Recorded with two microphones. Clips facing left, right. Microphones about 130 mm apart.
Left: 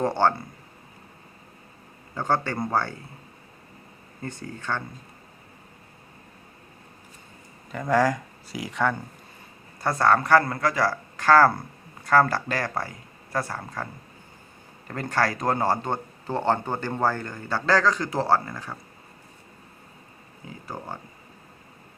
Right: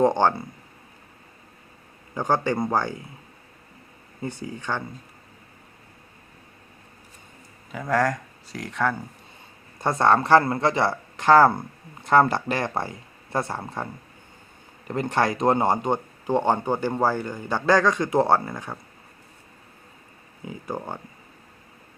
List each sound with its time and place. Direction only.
0.0 s speech: 15° right (ahead or behind)
2.1 s speech: 15° right (ahead or behind)
4.2 s speech: 10° right (ahead or behind)
7.7 s speech: centre (ahead or behind)
9.8 s speech: 20° right (ahead or behind)
14.8 s speech: 20° right (ahead or behind)